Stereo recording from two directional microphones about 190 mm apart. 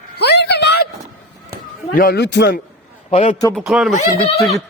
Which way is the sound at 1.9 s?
55° left (ahead or behind).